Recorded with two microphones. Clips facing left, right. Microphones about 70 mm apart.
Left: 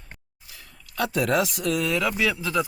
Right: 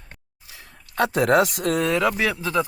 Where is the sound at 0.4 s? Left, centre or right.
Right.